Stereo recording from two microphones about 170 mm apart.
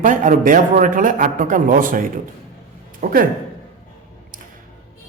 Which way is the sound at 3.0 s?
60° right (ahead or behind).